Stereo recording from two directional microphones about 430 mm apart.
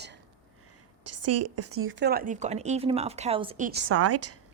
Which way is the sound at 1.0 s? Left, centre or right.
Right.